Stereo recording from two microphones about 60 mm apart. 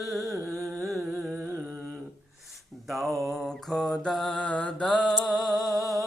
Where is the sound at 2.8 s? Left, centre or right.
Centre.